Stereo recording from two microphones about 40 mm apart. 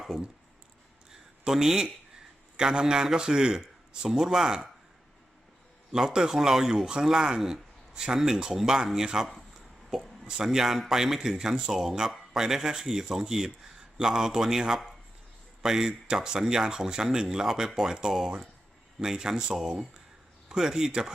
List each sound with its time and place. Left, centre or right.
1.1 s a sound: centre
2.6 s speech: centre
5.9 s speech: centre
9.9 s a sound: centre
10.2 s speech: centre
15.6 s speech: centre